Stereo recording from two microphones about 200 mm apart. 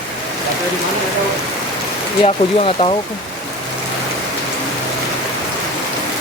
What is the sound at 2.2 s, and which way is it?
Speech, 25° left (ahead or behind).